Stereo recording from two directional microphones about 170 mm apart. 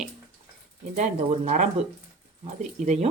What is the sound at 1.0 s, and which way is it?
Speech, 40° right (ahead or behind).